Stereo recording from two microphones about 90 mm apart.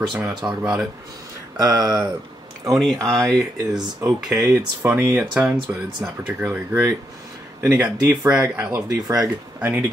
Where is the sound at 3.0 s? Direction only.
5° left (ahead or behind).